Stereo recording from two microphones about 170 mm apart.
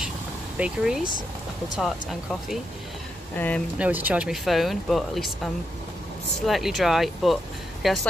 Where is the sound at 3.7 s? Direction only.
10° right (ahead or behind).